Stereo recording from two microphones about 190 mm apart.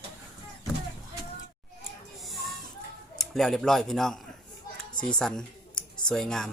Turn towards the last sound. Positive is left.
turn(degrees=0)  # may be behind; listen again after turning